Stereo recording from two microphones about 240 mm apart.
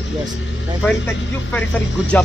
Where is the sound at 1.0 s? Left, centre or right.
Centre.